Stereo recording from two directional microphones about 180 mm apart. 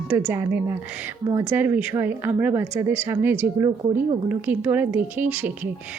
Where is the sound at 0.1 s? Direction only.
10° right (ahead or behind).